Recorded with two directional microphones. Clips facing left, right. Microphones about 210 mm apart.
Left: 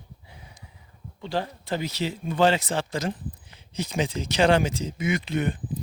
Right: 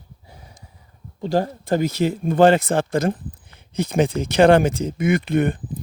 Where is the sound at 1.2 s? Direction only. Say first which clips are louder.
Right 8 dB; 45° right (ahead or behind).